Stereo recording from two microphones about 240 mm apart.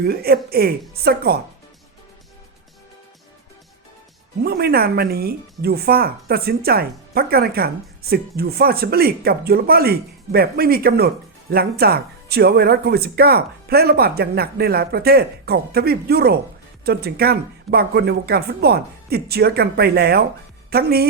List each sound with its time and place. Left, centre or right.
0.0 s speech: right
4.4 s a woman's voice: right